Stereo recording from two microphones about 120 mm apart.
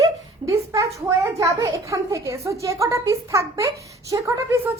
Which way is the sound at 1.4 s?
25° right (ahead or behind).